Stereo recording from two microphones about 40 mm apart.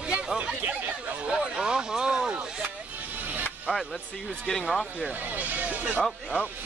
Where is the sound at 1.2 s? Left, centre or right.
Right.